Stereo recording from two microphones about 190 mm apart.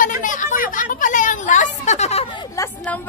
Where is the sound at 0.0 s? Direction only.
45° left (ahead or behind).